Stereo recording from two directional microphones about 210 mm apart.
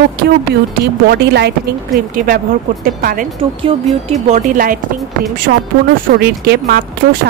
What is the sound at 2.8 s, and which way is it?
Speech, 45° right (ahead or behind).